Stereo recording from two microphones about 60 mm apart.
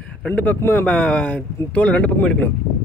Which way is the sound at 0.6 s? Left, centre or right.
Left.